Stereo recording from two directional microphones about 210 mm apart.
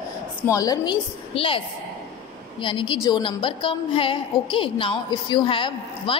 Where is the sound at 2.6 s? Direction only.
25° left (ahead or behind).